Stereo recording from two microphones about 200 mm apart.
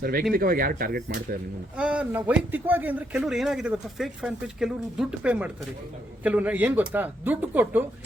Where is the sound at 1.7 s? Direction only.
5° right (ahead or behind).